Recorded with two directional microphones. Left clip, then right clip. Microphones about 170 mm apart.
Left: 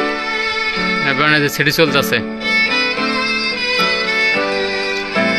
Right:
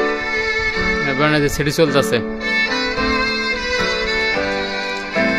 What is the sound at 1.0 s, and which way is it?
Speech, 10° right (ahead or behind).